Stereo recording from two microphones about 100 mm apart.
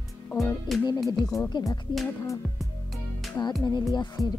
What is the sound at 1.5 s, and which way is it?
Speech, 50° left (ahead or behind).